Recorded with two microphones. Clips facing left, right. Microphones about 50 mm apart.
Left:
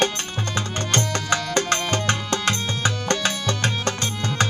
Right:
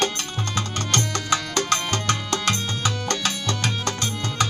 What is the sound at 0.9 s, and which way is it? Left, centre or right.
Music, left.